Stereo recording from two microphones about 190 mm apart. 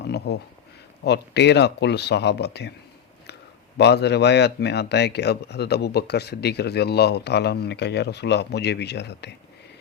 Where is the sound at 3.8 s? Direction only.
60° left (ahead or behind).